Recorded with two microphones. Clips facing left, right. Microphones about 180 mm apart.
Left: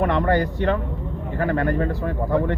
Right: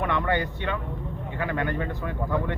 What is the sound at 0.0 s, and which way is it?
Speech, 40° left (ahead or behind).